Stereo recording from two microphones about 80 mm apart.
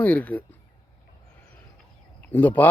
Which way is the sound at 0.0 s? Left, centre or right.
Centre.